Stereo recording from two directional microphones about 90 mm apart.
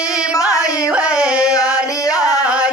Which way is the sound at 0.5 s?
40° left (ahead or behind).